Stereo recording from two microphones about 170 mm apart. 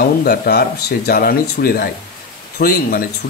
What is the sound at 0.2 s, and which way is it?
Speech, 65° left (ahead or behind).